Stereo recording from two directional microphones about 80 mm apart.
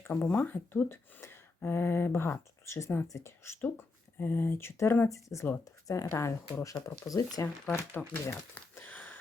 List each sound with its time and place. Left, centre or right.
0.0 s speech: left
7.4 s speech: left